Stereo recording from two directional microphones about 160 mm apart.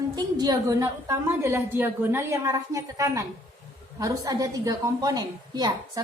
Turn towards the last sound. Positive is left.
turn(degrees=-25)  # may be behind; listen again after turning